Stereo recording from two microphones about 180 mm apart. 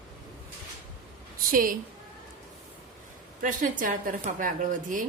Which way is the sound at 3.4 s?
45° right (ahead or behind).